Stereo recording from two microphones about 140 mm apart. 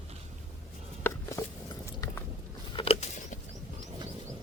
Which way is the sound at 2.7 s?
45° left (ahead or behind).